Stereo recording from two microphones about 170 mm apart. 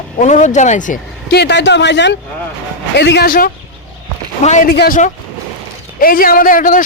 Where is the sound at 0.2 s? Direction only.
45° left (ahead or behind).